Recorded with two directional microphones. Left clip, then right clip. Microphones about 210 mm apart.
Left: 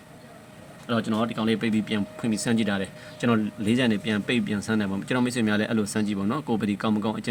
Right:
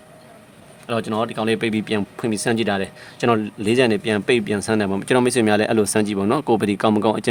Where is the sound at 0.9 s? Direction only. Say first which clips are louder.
Right 4 dB; 55° right (ahead or behind).